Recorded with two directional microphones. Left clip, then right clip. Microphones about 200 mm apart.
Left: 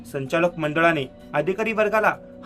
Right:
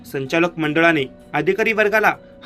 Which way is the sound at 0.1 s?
Centre (ahead or behind).